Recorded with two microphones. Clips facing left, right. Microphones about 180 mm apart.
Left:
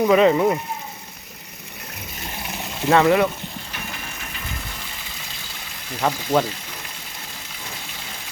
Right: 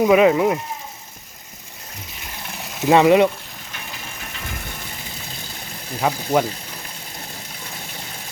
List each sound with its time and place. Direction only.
0.0 s speech: 10° right (ahead or behind)
2.5 s a sound: centre (ahead or behind)
2.9 s speech: 15° right (ahead or behind)
6.0 s speech: 10° right (ahead or behind)